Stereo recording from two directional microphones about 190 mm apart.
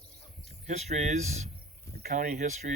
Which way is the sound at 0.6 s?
35° right (ahead or behind).